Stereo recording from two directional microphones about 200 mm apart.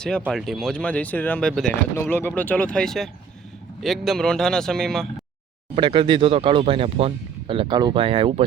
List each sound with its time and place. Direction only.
0.3 s speech: centre (ahead or behind)
5.7 s speech: 25° right (ahead or behind)